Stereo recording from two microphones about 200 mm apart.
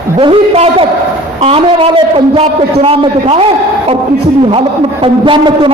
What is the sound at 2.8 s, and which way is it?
Speech, 30° right (ahead or behind).